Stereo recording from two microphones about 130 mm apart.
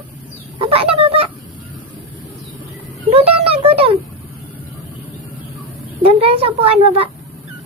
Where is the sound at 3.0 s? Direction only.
50° right (ahead or behind).